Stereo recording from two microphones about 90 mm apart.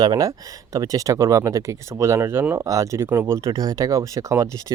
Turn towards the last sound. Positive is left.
turn(degrees=-35)  # may be behind; listen again after turning